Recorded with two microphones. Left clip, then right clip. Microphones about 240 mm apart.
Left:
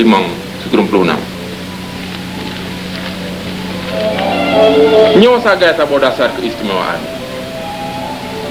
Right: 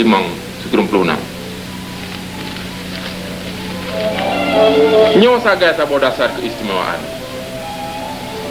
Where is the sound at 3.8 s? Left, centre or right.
Right.